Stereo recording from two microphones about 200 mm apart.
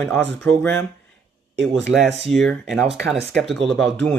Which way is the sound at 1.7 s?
60° right (ahead or behind).